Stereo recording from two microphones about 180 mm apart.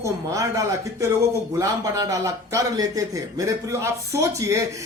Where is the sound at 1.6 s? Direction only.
20° right (ahead or behind).